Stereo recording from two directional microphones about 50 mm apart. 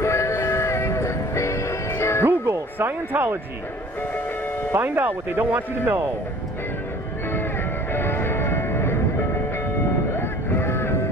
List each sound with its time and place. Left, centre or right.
0.0 s music: left
2.2 s music: right
4.7 s speech: right
7.9 s music: left
10.1 s music: left